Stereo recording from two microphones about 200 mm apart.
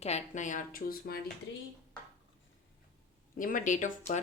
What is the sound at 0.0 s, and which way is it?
Speech, 35° left (ahead or behind).